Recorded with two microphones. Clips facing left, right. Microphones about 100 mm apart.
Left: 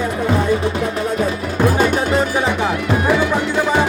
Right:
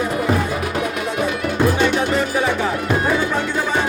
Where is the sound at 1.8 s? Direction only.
40° left (ahead or behind).